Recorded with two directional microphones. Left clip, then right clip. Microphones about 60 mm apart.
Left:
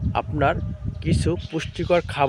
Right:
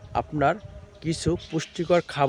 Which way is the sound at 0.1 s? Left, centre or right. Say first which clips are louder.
Left 1 dB; centre.